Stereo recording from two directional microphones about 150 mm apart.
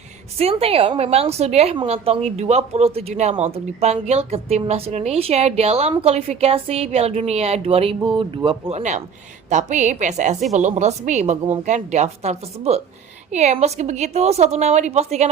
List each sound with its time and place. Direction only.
0.5 s a woman's voice: 40° right (ahead or behind)
8.8 s a woman's voice: 50° right (ahead or behind)